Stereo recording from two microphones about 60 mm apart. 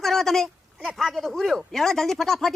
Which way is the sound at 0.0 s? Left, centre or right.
Centre.